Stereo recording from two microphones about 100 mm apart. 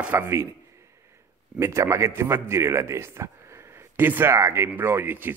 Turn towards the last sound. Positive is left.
turn(degrees=-20)  # may be behind; listen again after turning